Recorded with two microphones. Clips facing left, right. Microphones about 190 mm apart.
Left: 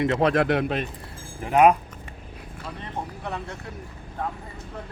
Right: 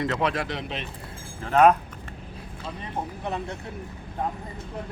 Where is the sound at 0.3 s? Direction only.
55° left (ahead or behind).